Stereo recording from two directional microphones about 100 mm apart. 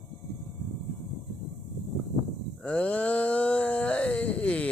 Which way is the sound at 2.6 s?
15° left (ahead or behind).